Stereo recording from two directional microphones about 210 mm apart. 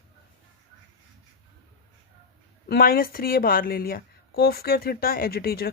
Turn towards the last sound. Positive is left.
turn(degrees=45)  # may be behind; listen again after turning